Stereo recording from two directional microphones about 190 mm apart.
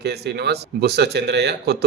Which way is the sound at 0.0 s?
60° right (ahead or behind).